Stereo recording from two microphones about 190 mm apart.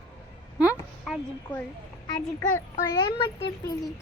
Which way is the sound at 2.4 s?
20° left (ahead or behind).